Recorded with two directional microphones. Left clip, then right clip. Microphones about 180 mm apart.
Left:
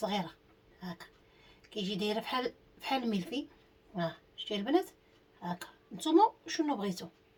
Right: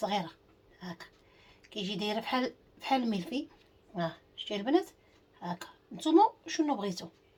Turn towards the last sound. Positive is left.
turn(degrees=-20)  # may be behind; listen again after turning